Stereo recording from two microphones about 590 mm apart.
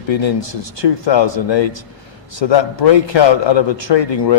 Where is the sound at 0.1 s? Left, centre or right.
Left.